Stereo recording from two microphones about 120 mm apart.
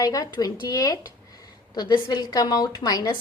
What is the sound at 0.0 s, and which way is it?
A woman's voice, 30° left (ahead or behind).